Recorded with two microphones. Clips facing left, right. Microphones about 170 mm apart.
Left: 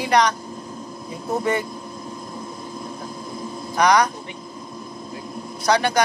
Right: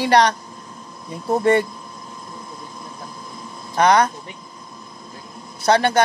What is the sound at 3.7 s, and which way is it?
Speech, 25° right (ahead or behind).